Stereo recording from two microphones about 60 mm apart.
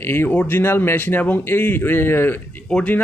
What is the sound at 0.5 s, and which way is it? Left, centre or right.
Speech, left.